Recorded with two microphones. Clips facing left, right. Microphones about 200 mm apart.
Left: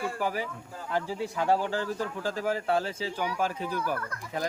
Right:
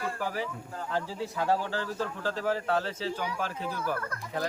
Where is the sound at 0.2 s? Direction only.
15° left (ahead or behind).